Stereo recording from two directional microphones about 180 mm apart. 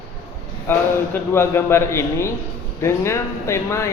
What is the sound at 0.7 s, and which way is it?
A man's voice, 10° left (ahead or behind).